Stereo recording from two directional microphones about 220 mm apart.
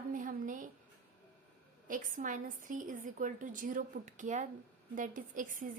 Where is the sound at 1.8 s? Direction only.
35° right (ahead or behind).